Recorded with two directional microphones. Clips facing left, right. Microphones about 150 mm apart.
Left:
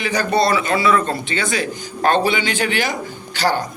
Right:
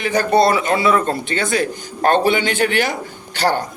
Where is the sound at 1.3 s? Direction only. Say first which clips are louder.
Right 3 dB; 55° right (ahead or behind).